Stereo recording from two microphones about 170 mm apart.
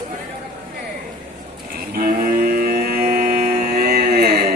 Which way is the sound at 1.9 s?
60° right (ahead or behind).